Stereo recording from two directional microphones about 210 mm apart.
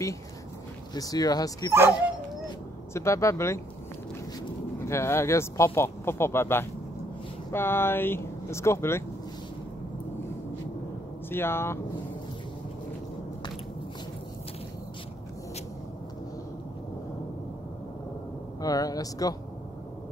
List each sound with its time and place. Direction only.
0.9 s speech: 15° left (ahead or behind)
2.9 s speech: 15° left (ahead or behind)
4.8 s speech: 10° left (ahead or behind)
11.2 s speech: 10° left (ahead or behind)
18.6 s speech: 15° left (ahead or behind)